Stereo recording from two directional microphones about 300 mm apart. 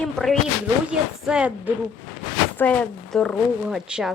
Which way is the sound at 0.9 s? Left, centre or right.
Centre.